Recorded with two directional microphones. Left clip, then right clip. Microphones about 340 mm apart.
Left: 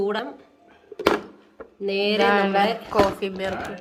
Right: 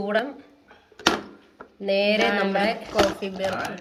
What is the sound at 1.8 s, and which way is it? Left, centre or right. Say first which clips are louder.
Speech: even; centre.